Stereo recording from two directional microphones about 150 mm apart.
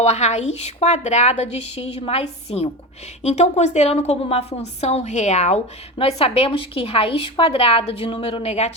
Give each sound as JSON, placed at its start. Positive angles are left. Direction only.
{"t": 0.0, "sound": "a woman's voice", "side_deg": 45}